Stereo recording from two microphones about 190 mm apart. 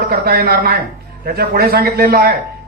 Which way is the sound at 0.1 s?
50° right (ahead or behind).